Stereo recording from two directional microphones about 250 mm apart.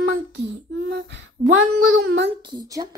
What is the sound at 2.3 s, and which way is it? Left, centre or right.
Speech, centre.